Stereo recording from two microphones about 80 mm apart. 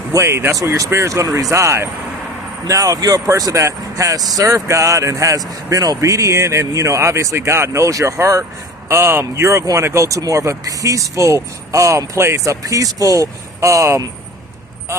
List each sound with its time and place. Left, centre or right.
0.1 s speech: right